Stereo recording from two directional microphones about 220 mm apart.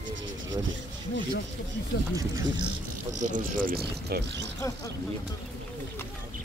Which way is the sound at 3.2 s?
35° right (ahead or behind).